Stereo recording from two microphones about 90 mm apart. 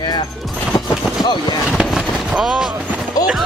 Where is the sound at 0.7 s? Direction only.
55° left (ahead or behind).